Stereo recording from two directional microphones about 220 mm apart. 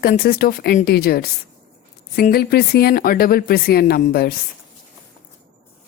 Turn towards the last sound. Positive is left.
turn(degrees=45)  # may be behind; listen again after turning